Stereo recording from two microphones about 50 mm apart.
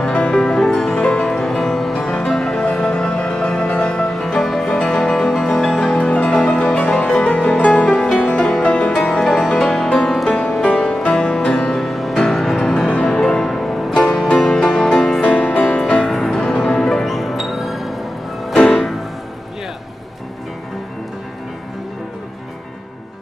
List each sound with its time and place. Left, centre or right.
0.0 s music: centre
4.2 s music: centre
8.9 s music: centre
11.0 s music: centre
15.2 s music: left
16.1 s music: centre
17.0 s music: centre